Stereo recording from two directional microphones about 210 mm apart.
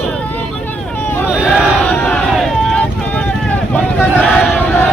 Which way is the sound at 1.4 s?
5° left (ahead or behind).